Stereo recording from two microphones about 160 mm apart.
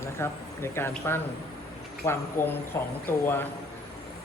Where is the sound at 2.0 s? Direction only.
15° left (ahead or behind).